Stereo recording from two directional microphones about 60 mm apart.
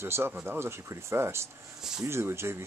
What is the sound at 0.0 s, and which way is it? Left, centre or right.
Speech, right.